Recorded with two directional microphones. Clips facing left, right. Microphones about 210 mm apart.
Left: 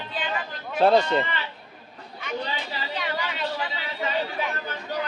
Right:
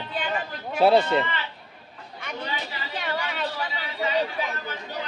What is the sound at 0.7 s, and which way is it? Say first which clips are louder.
Speech: even; 5° right (ahead or behind).